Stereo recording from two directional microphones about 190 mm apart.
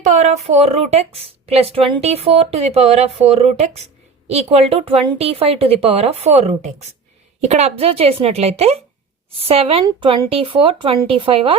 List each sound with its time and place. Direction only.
0.0 s a woman's voice: 40° right (ahead or behind)